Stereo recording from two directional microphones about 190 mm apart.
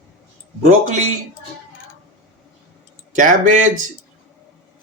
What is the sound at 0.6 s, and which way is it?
Speech, 40° right (ahead or behind).